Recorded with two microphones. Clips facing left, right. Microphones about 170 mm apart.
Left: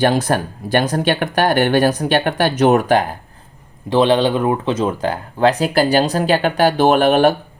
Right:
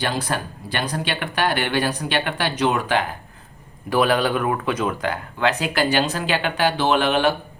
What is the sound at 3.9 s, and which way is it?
Speech, 25° left (ahead or behind).